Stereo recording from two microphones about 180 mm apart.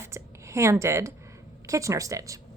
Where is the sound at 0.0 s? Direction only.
15° right (ahead or behind).